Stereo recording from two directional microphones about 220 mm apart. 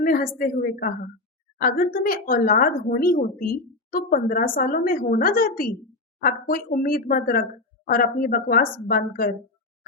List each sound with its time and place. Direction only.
0.0 s a woman's voice: 40° left (ahead or behind)